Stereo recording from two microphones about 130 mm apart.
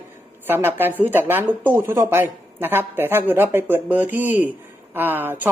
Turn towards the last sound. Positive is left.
turn(degrees=-15)  # may be behind; listen again after turning